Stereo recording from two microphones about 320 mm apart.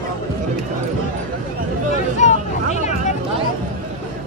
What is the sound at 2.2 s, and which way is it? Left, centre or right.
Vehicle, left.